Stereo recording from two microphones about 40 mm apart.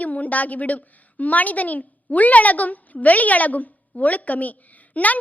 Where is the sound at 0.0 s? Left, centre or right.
Left.